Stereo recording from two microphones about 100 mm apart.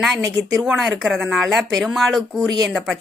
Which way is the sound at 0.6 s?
5° right (ahead or behind).